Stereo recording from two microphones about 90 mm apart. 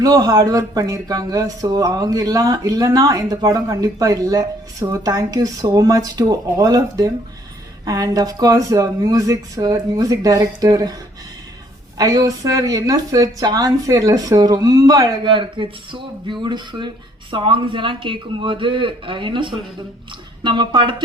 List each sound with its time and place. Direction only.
0.0 s speech: 45° right (ahead or behind)
11.9 s speech: 45° right (ahead or behind)
15.2 s speech: 65° right (ahead or behind)
17.3 s speech: 70° right (ahead or behind)